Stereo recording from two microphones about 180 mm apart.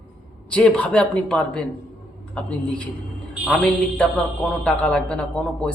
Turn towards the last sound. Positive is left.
turn(degrees=5)  # may be behind; listen again after turning